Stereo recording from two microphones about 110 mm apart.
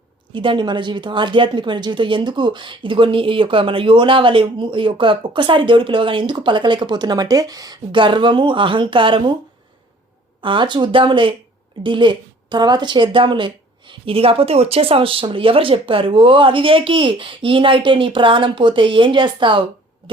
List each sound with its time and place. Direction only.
0.3 s a woman's voice: 50° right (ahead or behind)
7.9 s a woman's voice: 45° right (ahead or behind)
10.4 s a woman's voice: 50° right (ahead or behind)